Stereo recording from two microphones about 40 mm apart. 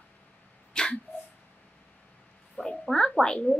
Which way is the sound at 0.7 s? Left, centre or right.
Left.